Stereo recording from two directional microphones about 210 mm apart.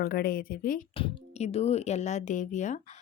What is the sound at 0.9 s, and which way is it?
Speech, 25° left (ahead or behind).